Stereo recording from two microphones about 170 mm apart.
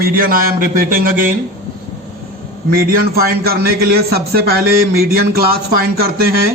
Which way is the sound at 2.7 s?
60° right (ahead or behind).